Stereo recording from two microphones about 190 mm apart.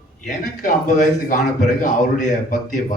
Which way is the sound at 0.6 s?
45° left (ahead or behind).